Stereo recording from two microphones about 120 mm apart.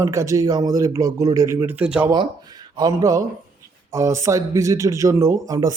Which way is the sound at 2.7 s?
30° right (ahead or behind).